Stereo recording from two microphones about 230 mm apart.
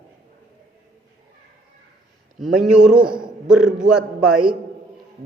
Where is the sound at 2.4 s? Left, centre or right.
Centre.